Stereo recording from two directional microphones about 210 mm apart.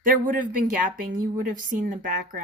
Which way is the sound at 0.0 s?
40° right (ahead or behind).